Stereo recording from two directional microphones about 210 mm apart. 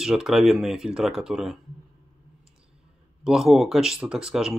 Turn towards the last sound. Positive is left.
turn(degrees=-5)  # may be behind; listen again after turning